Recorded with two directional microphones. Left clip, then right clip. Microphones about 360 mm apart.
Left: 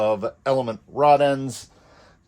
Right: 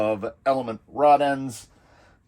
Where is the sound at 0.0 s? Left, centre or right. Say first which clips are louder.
Left 2 dB; centre.